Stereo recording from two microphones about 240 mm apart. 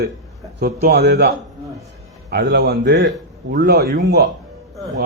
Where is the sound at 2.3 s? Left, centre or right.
Right.